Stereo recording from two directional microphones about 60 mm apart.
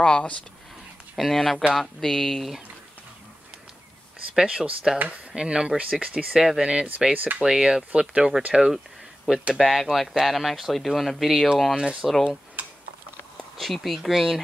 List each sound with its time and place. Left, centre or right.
0.0 s speech: centre
1.1 s speech: centre
4.3 s speech: centre
4.9 s speech: right
5.3 s speech: centre
6.3 s speech: centre
6.6 s speech: centre
7.4 s speech: centre
8.7 s a sound: centre
9.6 s speech: centre
12.0 s speech: centre
12.6 s typing: right
13.6 s speech: centre